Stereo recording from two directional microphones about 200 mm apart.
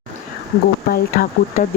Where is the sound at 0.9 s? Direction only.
45° left (ahead or behind).